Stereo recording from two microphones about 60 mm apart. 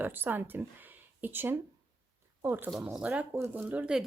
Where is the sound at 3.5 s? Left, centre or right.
Right.